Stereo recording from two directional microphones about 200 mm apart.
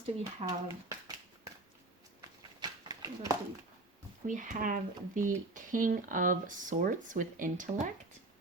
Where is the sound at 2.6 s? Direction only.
20° right (ahead or behind).